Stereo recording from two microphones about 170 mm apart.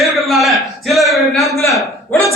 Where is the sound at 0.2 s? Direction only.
Centre (ahead or behind).